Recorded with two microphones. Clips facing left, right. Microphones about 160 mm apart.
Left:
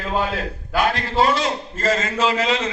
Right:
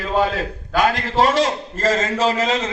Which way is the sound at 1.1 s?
40° right (ahead or behind).